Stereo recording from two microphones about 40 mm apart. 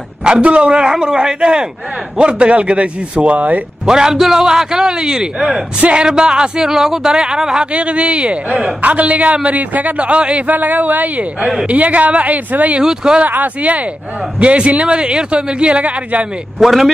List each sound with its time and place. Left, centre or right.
0.2 s a man's voice: right
3.8 s a man's voice: centre
6.0 s a man's voice: centre
7.7 s a man's voice: right
12.8 s a man's voice: centre
13.3 s a man's voice: right
16.5 s a man's voice: centre